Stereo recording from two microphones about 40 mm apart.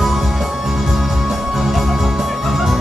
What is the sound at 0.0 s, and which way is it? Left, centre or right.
Music, centre.